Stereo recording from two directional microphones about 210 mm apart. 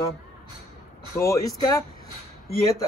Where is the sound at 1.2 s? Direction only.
15° left (ahead or behind).